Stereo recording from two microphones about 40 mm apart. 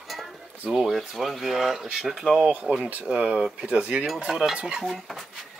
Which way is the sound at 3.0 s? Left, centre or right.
Centre.